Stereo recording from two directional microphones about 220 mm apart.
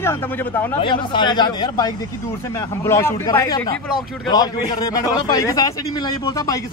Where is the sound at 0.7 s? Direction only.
20° left (ahead or behind).